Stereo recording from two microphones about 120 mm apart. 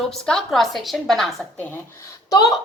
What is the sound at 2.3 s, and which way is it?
Speech, 30° left (ahead or behind).